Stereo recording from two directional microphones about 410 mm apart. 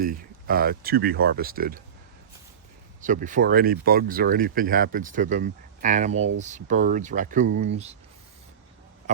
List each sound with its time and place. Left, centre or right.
0.0 s speech: right
3.0 s speech: centre
9.1 s a sound: centre